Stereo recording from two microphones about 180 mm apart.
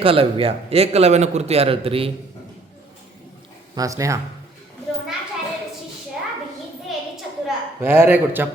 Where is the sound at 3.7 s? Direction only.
20° right (ahead or behind).